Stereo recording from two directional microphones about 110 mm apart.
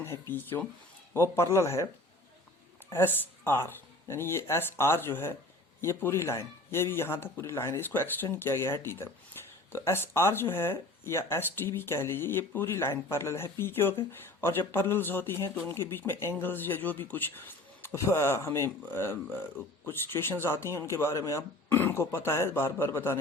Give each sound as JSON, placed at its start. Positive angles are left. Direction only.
{"t": 0.0, "sound": "speech", "side_deg": 20}
{"t": 2.9, "sound": "speech", "side_deg": 20}